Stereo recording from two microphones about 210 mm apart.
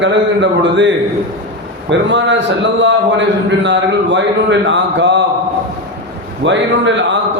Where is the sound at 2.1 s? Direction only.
60° right (ahead or behind).